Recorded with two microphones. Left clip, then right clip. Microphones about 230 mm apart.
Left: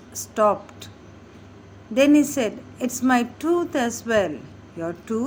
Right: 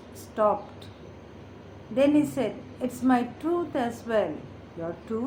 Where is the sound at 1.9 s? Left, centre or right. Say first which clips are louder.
Left 5 dB; left.